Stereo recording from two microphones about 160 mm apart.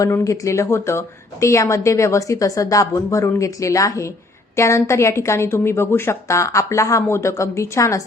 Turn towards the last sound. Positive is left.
turn(degrees=20)  # may be behind; listen again after turning